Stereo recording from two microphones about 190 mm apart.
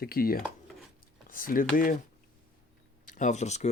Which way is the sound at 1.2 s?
45° left (ahead or behind).